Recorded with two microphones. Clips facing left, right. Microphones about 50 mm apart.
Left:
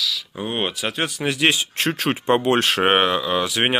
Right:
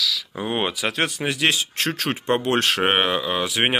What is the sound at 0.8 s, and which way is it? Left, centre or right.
Speech, right.